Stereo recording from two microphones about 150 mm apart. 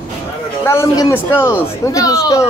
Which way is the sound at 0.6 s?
20° left (ahead or behind).